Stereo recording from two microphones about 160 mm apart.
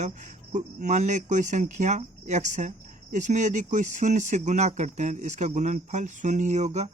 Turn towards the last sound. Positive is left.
turn(degrees=-45)  # may be behind; listen again after turning